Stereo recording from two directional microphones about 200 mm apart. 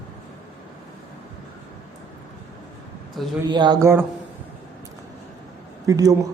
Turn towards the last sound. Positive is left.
turn(degrees=-15)  # may be behind; listen again after turning